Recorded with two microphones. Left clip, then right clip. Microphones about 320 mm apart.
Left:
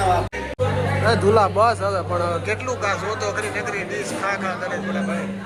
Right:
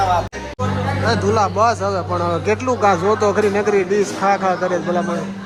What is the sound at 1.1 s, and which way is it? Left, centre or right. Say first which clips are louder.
Speech: even; centre.